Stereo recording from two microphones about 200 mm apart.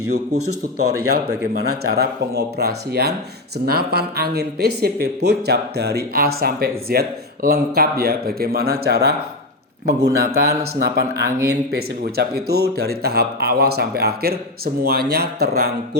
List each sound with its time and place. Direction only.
0.9 s speech: 55° right (ahead or behind)
10.2 s speech: 50° right (ahead or behind)